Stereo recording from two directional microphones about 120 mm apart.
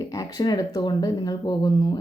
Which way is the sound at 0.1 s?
30° left (ahead or behind).